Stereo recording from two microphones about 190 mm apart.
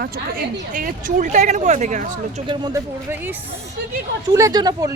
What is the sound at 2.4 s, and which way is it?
Speech, 25° right (ahead or behind).